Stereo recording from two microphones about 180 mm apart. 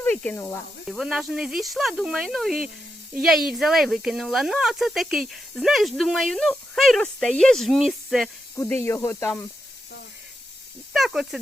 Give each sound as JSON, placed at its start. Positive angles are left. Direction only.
{"t": 0.0, "sound": "speech", "side_deg": 10}
{"t": 0.9, "sound": "speech", "side_deg": 0}
{"t": 8.5, "sound": "speech", "side_deg": 15}
{"t": 10.9, "sound": "speech", "side_deg": 0}